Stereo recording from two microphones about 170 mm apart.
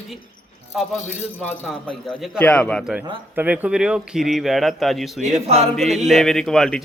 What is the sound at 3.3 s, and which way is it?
A man's voice, 10° right (ahead or behind).